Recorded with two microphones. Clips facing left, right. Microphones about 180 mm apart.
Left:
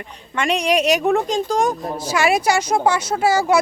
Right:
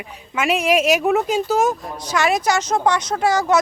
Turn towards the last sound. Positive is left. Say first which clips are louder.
# left 1 dB
turn(degrees=10)  # may be behind; listen again after turning